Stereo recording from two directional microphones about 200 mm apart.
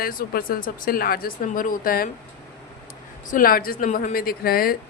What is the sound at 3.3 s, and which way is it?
Speech, 45° left (ahead or behind).